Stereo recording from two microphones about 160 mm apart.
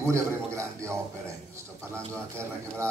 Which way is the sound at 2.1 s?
15° right (ahead or behind).